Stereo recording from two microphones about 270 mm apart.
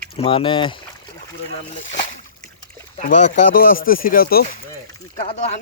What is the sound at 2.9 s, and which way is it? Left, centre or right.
Speech, left.